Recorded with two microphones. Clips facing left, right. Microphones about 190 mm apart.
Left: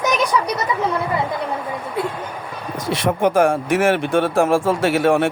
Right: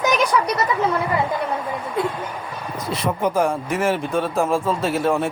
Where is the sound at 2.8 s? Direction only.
90° left.